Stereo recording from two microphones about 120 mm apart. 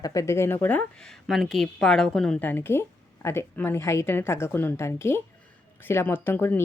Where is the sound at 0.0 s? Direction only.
25° left (ahead or behind).